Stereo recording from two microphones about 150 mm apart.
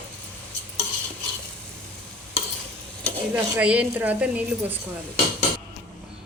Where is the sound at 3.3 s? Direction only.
10° right (ahead or behind).